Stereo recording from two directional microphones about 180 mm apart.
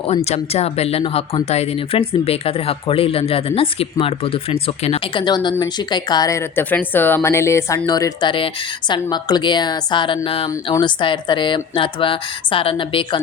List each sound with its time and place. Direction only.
0.3 s speech: 35° left (ahead or behind)